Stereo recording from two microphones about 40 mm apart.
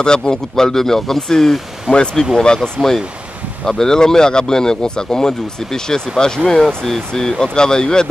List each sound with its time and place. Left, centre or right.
0.0 s speech: centre